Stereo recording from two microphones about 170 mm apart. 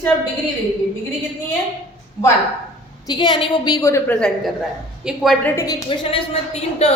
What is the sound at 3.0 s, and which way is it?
A woman's voice, 25° left (ahead or behind).